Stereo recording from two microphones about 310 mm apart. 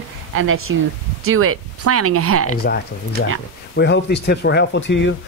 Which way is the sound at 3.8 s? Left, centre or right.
Left.